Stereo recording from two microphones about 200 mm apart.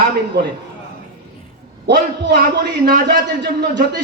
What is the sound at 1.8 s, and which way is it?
A man's voice, 50° right (ahead or behind).